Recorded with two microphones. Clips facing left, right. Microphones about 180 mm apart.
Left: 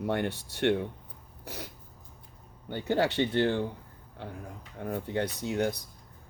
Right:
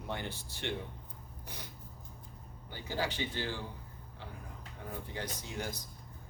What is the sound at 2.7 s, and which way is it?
Speech, 60° left (ahead or behind).